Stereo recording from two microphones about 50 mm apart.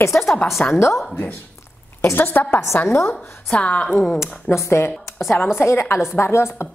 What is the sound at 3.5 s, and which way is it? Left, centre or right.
Speech, left.